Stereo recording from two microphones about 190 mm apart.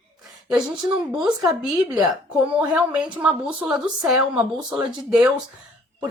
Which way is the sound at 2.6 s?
5° right (ahead or behind).